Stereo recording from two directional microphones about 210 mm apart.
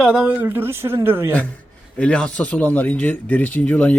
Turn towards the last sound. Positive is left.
turn(degrees=5)  # may be behind; listen again after turning